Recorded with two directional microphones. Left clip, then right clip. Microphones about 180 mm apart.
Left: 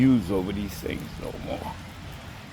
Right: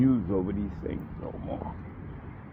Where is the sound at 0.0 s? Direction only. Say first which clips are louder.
Left 3 dB; 30° left (ahead or behind).